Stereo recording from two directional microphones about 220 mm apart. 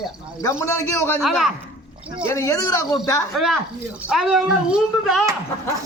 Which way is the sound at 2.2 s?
15° left (ahead or behind).